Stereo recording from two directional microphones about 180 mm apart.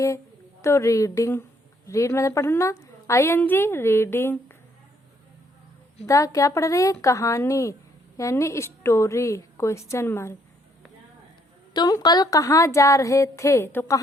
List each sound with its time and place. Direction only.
0.6 s a woman's voice: 15° left (ahead or behind)
6.1 s a woman's voice: 20° left (ahead or behind)
11.7 s a woman's voice: 20° left (ahead or behind)